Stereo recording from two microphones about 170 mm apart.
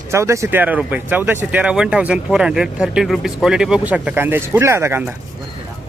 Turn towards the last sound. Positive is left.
turn(degrees=-10)  # may be behind; listen again after turning